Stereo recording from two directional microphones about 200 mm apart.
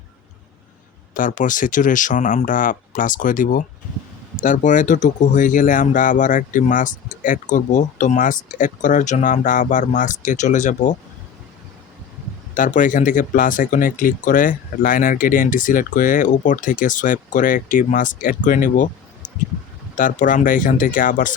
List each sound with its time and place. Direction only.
1.1 s speech: 40° left (ahead or behind)
12.5 s speech: 40° left (ahead or behind)